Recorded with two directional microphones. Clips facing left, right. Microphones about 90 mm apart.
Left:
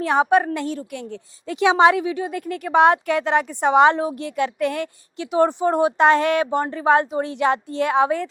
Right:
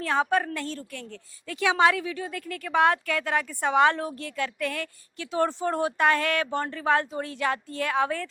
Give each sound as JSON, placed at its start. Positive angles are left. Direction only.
{"t": 0.0, "sound": "a woman's voice", "side_deg": 20}